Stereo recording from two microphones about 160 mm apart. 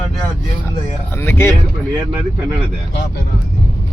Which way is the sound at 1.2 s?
15° left (ahead or behind).